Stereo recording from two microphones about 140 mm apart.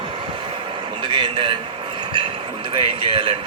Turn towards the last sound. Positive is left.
turn(degrees=-35)  # may be behind; listen again after turning